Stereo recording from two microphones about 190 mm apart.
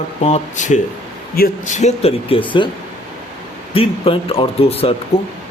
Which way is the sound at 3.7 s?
30° left (ahead or behind).